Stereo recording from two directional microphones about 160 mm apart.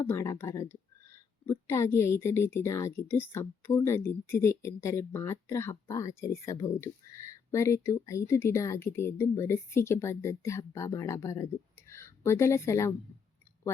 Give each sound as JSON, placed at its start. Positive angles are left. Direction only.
{"t": 0.0, "sound": "a woman's voice", "side_deg": 15}